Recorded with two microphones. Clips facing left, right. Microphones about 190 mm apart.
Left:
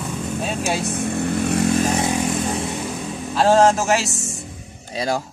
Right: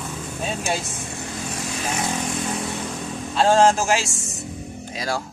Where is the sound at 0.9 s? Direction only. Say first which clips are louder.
Left 11 dB; 60° left (ahead or behind).